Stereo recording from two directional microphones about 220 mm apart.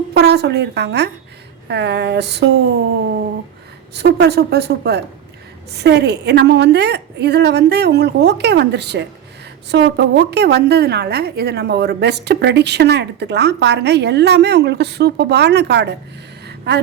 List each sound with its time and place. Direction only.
0.1 s a woman's voice: 45° right (ahead or behind)
3.9 s a woman's voice: 50° right (ahead or behind)
16.5 s a sound: 50° right (ahead or behind)